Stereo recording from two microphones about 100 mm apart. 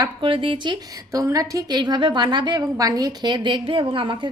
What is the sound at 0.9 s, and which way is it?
A woman's voice, 30° right (ahead or behind).